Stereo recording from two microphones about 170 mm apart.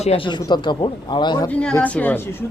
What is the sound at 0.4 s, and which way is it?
Speech, 25° left (ahead or behind).